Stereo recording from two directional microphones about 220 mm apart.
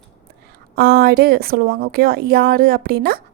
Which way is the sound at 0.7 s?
45° right (ahead or behind).